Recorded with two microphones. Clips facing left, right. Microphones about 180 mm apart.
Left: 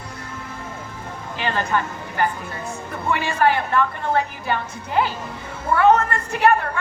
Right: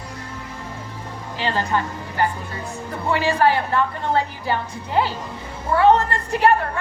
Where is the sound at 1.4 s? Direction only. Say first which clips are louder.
Even; 30° right (ahead or behind).